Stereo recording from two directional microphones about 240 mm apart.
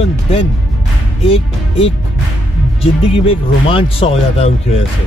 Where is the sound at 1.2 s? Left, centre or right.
Left.